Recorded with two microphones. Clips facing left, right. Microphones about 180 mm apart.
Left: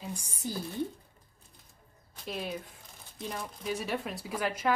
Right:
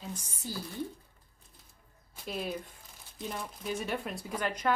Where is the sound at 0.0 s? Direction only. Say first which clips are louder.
Left 3 dB; 10° left (ahead or behind).